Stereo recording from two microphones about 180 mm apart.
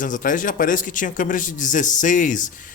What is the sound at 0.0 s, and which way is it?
A man's voice, 45° left (ahead or behind).